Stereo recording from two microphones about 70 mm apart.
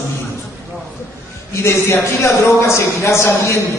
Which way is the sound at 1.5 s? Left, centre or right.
Left.